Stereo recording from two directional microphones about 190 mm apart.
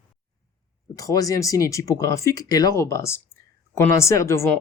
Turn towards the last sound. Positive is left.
turn(degrees=15)  # may be behind; listen again after turning